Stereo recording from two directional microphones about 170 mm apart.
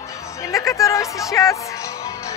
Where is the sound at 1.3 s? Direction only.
20° left (ahead or behind).